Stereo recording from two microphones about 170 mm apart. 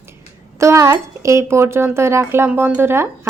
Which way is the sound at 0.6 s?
15° right (ahead or behind).